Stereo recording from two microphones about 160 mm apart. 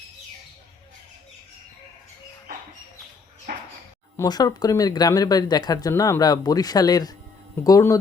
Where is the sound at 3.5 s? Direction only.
70° right (ahead or behind).